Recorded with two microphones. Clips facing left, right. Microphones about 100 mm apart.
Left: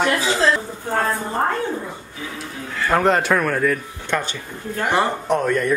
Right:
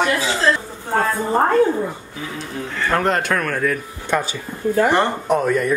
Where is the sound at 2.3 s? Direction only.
5° left (ahead or behind).